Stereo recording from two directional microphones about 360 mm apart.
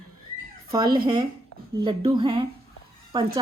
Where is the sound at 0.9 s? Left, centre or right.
Right.